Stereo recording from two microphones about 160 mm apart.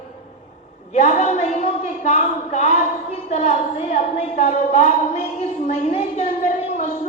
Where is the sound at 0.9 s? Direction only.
45° left (ahead or behind).